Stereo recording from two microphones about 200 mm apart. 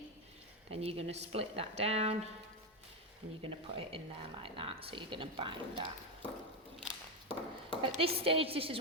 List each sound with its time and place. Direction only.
0.7 s speech: 30° right (ahead or behind)
3.4 s speech: 25° right (ahead or behind)
6.8 s a sound: 25° right (ahead or behind)